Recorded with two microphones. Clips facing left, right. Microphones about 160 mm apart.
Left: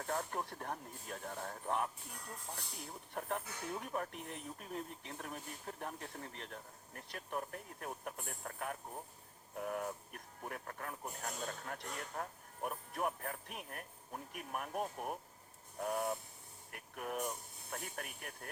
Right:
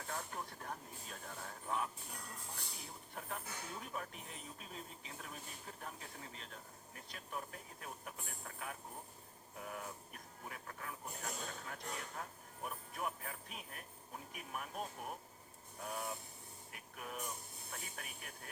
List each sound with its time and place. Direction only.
0.1 s speech: 45° left (ahead or behind)
3.2 s speech: 55° left (ahead or behind)